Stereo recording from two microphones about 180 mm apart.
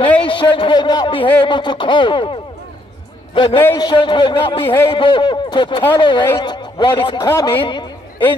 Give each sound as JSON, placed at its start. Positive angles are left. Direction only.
{"t": 0.2, "sound": "a man's voice", "side_deg": 30}
{"t": 3.3, "sound": "a man's voice", "side_deg": 30}